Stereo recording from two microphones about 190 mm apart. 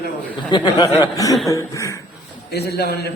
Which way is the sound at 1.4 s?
15° left (ahead or behind).